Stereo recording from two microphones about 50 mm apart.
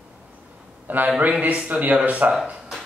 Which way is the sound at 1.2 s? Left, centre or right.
Right.